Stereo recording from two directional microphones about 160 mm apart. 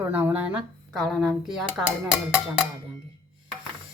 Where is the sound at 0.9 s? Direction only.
Centre (ahead or behind).